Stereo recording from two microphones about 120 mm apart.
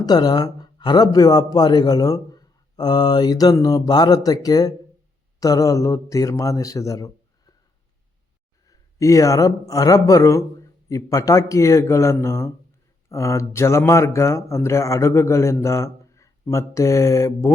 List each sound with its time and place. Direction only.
0.0 s a man's voice: 35° left (ahead or behind)
8.6 s speech: 30° left (ahead or behind)